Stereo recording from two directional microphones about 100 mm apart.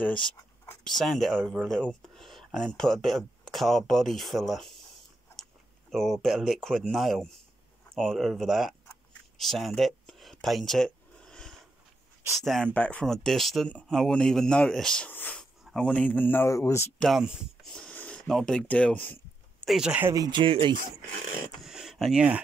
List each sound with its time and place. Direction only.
0.0 s a man's voice: 10° left (ahead or behind)
9.4 s a sound: centre (ahead or behind)
12.4 s speech: centre (ahead or behind)
12.7 s speech: 10° left (ahead or behind)
13.7 s a man's voice: 15° left (ahead or behind)
15.0 s a sound: 20° left (ahead or behind)
15.7 s a man's voice: 10° left (ahead or behind)
16.4 s speech: 30° left (ahead or behind)
17.2 s speech: 5° right (ahead or behind)
17.6 s a sound: 10° left (ahead or behind)
19.6 s speech: 5° right (ahead or behind)
20.2 s speech: 50° right (ahead or behind)
21.6 s a sound: 5° right (ahead or behind)